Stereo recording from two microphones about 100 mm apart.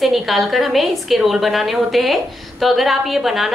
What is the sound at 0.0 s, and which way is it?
A woman's voice, centre (ahead or behind).